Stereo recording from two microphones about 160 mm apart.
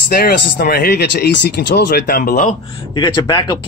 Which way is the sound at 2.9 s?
30° left (ahead or behind).